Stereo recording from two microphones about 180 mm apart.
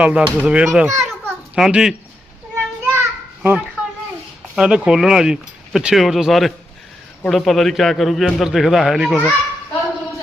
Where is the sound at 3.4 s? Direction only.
5° right (ahead or behind).